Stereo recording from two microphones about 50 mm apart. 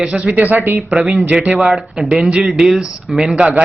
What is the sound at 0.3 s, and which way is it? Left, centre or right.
Speech, right.